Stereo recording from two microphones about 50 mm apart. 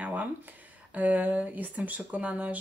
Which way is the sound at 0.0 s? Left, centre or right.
Right.